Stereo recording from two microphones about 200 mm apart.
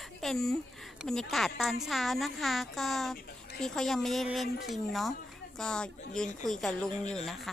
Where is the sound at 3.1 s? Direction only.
50° left (ahead or behind).